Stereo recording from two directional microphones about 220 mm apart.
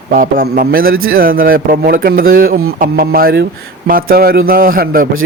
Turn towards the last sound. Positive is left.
turn(degrees=-40)  # may be behind; listen again after turning